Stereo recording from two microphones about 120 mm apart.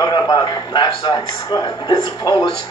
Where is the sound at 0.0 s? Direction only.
35° left (ahead or behind).